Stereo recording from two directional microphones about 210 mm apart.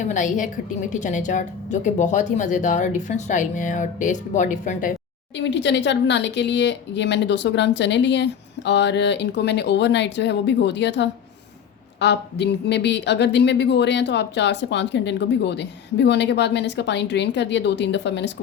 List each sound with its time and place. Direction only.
0.0 s speech: 35° left (ahead or behind)
5.5 s a woman's voice: 55° left (ahead or behind)